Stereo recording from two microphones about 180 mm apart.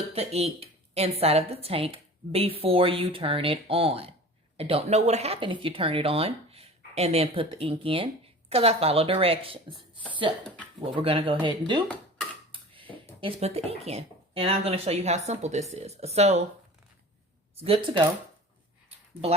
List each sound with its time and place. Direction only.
0.1 s speech: 35° right (ahead or behind)
12.5 s a sound: 30° right (ahead or behind)
13.2 s speech: 35° right (ahead or behind)
17.6 s speech: 30° right (ahead or behind)